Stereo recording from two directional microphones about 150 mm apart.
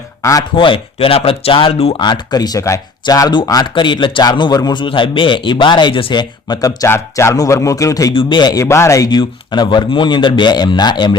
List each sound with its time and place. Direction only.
0.2 s speech: 20° left (ahead or behind)
0.5 s speech: 35° left (ahead or behind)
8.1 s speech: 35° left (ahead or behind)